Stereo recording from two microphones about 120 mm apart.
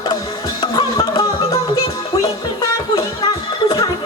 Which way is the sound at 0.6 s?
35° left (ahead or behind).